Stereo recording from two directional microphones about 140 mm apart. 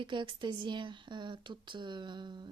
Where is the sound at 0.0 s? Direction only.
35° right (ahead or behind).